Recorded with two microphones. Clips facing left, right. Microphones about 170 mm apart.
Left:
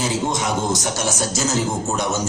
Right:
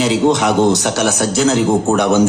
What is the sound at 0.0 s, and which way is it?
A man's voice, 70° right (ahead or behind).